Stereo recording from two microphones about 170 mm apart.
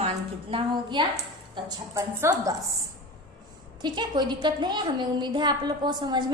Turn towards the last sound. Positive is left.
turn(degrees=-25)  # may be behind; listen again after turning